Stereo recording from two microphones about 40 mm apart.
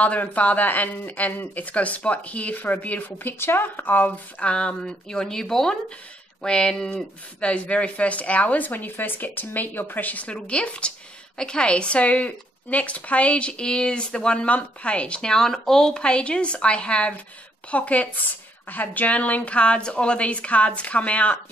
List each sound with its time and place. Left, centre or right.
0.0 s speech: left
3.3 s speech: left
4.4 s speech: left
10.1 s speech: left
15.3 s speech: centre; by 21.4 s left